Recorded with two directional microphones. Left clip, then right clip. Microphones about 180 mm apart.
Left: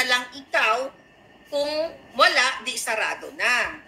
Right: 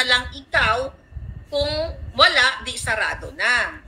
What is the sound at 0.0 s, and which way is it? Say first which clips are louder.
Speech: right 3 dB; 35° right (ahead or behind).